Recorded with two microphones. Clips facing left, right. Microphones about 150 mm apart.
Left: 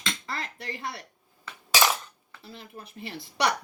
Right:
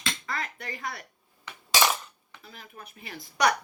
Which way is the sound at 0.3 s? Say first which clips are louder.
Right 1 dB; 30° left (ahead or behind).